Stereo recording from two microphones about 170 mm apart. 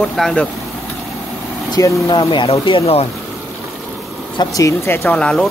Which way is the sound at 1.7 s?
20° left (ahead or behind).